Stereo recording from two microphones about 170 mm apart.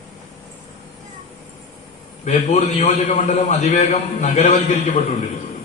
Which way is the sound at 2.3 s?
45° left (ahead or behind).